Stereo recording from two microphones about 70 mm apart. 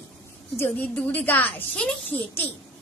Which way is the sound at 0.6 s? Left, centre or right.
Left.